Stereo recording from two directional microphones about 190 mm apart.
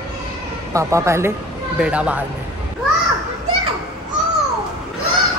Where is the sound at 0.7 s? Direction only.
15° right (ahead or behind).